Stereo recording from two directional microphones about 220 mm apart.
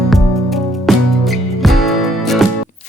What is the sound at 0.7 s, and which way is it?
Music, centre (ahead or behind).